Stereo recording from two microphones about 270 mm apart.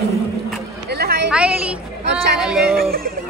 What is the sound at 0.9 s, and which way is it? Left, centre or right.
Speech, right.